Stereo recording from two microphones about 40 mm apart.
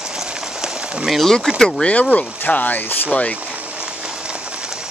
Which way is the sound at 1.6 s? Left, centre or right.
Centre.